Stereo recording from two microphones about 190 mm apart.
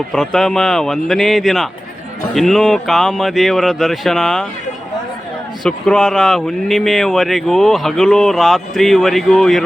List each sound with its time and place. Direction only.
0.1 s speech: 5° left (ahead or behind)
5.6 s speech: 5° left (ahead or behind)